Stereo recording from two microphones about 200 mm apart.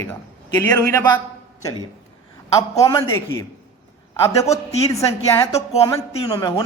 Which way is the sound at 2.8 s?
15° left (ahead or behind).